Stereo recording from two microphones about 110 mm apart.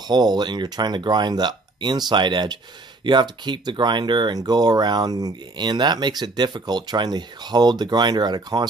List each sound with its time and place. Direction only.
0.1 s speech: 40° right (ahead or behind)